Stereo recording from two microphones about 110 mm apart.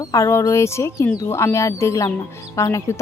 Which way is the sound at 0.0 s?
30° left (ahead or behind).